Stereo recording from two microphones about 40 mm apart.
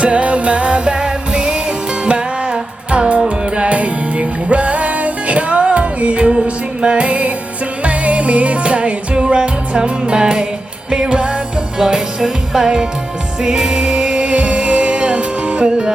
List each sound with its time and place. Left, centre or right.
0.0 s music: right
11.8 s music: centre